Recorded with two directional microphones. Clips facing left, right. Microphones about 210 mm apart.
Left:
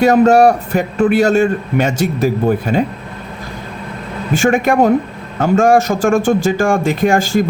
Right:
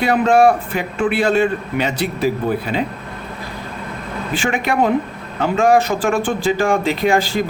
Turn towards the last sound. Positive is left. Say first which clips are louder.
# left 3 dB
turn(degrees=45)  # may be behind; listen again after turning